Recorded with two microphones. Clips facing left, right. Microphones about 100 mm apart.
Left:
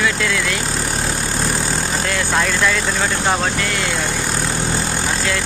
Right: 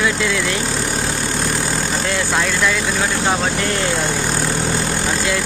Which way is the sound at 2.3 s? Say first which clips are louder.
Left 2 dB; centre (ahead or behind).